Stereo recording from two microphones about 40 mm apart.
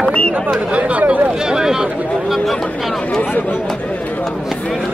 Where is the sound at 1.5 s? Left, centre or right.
Centre.